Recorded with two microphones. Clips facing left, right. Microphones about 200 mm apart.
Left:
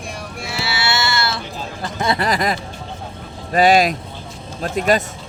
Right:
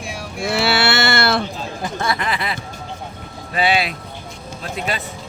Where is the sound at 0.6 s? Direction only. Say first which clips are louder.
Right 4 dB; 60° right (ahead or behind).